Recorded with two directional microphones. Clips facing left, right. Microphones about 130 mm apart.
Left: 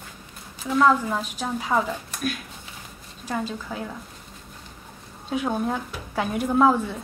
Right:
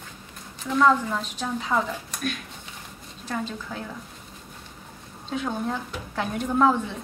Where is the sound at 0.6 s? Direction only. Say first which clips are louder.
Left 1 dB; 5° left (ahead or behind).